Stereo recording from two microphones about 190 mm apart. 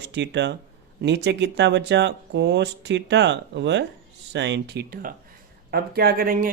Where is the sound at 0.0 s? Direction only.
65° right (ahead or behind).